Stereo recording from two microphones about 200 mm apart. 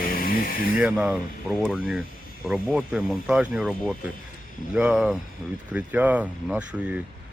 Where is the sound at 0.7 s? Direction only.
5° right (ahead or behind).